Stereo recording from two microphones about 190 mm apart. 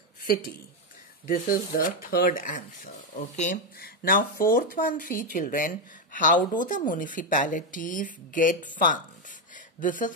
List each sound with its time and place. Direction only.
1.2 s speech: 45° left (ahead or behind)